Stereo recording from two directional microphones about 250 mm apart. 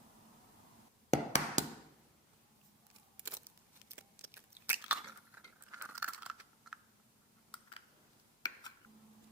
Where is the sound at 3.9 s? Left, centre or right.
Centre.